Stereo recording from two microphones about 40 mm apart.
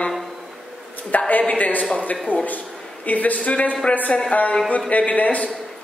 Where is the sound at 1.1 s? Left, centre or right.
Left.